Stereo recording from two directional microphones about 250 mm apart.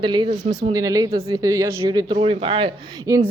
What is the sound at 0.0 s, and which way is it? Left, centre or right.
Speech, centre.